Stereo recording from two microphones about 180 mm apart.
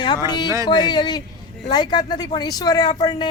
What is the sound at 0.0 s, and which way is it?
Speech, 25° left (ahead or behind).